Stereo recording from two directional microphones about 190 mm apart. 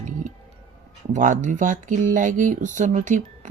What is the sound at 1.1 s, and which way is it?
Speech, 40° right (ahead or behind).